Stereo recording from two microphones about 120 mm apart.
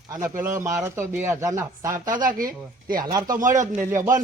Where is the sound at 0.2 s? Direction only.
25° right (ahead or behind).